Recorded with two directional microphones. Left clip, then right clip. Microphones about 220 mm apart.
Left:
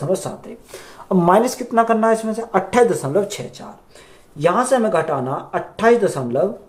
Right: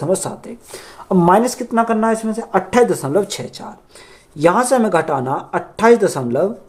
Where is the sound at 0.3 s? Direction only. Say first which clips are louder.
Right 2 dB; 45° right (ahead or behind).